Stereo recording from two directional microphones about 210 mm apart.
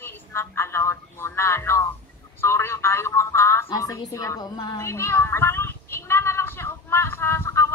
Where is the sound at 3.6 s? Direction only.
15° left (ahead or behind).